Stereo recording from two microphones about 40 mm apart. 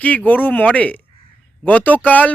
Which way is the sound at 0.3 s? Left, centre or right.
Left.